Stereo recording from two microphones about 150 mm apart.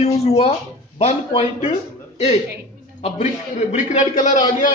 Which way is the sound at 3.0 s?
50° left (ahead or behind).